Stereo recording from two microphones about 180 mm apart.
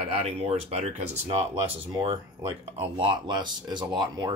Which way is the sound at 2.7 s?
30° right (ahead or behind).